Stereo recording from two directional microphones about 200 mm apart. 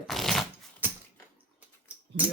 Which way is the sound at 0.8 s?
10° right (ahead or behind).